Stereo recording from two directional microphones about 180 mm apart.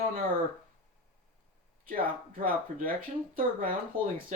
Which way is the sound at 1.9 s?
50° right (ahead or behind).